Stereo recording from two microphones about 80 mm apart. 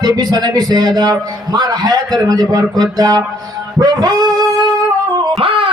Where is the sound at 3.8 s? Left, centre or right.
Right.